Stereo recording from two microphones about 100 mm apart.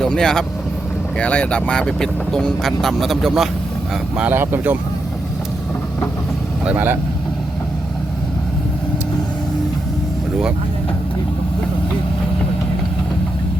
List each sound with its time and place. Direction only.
0.0 s speech: 5° left (ahead or behind)
4.3 s speech: 20° right (ahead or behind)
6.7 s speech: 20° right (ahead or behind)